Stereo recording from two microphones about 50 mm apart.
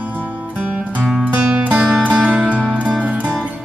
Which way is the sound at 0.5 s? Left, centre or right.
Right.